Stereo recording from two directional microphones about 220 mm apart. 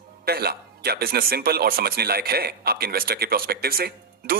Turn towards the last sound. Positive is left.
turn(degrees=-45)  # may be behind; listen again after turning